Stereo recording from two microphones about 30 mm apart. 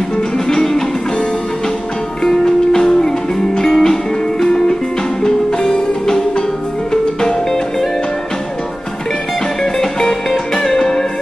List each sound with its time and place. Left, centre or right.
0.5 s music: centre
2.2 s music: centre
9.6 s music: left